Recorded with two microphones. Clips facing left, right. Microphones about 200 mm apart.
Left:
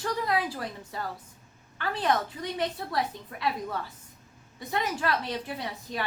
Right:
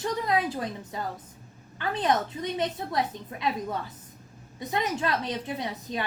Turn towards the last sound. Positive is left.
turn(degrees=-20)  # may be behind; listen again after turning